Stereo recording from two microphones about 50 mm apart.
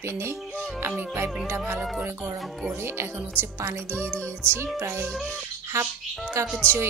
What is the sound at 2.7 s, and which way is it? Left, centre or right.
Speech, right.